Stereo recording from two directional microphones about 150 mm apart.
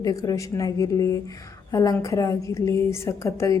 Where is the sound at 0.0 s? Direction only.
25° left (ahead or behind).